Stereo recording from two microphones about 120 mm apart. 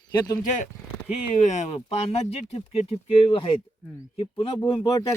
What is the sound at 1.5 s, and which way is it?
Speech, 70° left (ahead or behind).